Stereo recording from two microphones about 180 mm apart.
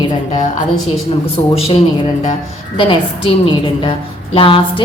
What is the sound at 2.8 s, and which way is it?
A woman's voice, 30° left (ahead or behind).